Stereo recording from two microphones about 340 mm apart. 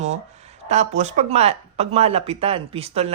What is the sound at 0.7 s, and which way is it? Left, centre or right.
Speech, centre.